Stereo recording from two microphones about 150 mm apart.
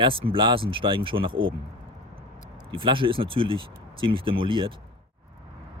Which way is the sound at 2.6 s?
35° right (ahead or behind).